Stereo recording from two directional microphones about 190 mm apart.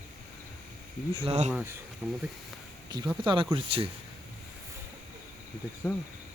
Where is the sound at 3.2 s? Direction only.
25° right (ahead or behind).